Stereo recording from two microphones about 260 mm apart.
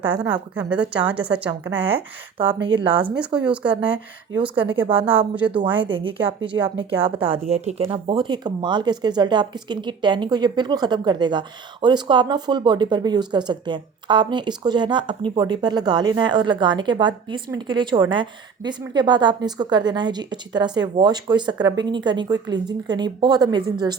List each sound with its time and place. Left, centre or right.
0.0 s speech: centre
1.5 s speech: centre
3.2 s speech: centre
4.5 s speech: centre
5.3 s speech: centre
5.5 s speech: centre